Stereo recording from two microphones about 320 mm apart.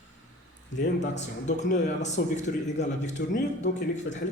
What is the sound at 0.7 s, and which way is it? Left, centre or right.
Speech, left.